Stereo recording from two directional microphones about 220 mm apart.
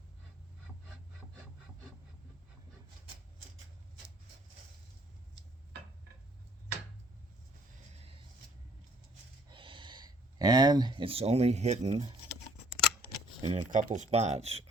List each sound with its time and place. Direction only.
9.5 s speech: 20° right (ahead or behind)
13.4 s speech: 30° right (ahead or behind)